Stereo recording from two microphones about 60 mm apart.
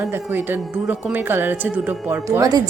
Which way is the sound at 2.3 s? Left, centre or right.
Right.